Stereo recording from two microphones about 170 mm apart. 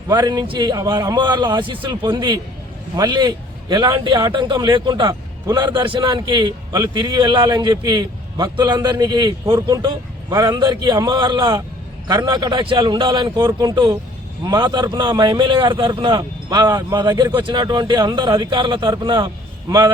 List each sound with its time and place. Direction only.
0.1 s a man's voice: 25° right (ahead or behind)